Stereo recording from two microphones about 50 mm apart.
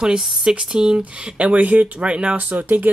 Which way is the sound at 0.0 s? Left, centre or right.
Centre.